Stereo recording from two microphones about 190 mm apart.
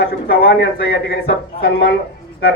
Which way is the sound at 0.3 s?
55° left (ahead or behind).